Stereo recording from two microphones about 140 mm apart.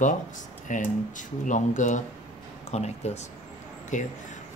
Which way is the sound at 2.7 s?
50° left (ahead or behind).